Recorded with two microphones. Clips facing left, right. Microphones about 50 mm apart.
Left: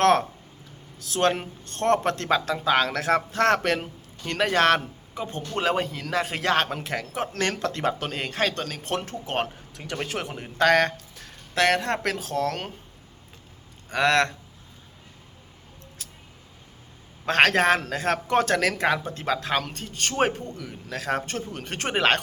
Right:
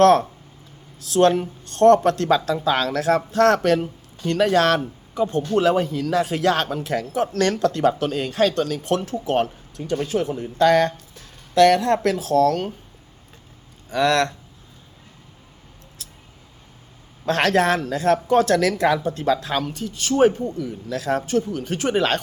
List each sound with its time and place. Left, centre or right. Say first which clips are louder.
0.0 s speech: right 5 dB; left
7.3 s speech: right 7 dB; left
9.7 s speech: right 10 dB; left
10.0 s a man's voice: right 6 dB; left
11.5 s speech: right 7 dB; left
12.5 s speech: right 8 dB; left
13.9 s speech: right 2 dB; left
17.2 s speech: right 1 dB; left
17.7 s speech: right 6 dB; left
19.6 s speech: right 5 dB; left
20.9 s speech: right 6 dB; left